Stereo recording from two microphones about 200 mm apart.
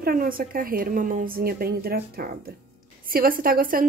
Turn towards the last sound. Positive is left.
turn(degrees=-45)  # may be behind; listen again after turning